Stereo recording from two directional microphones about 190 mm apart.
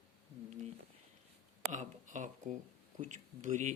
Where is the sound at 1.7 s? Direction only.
40° right (ahead or behind).